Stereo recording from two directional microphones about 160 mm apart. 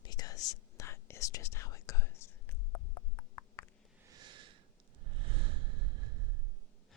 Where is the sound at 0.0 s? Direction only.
25° left (ahead or behind).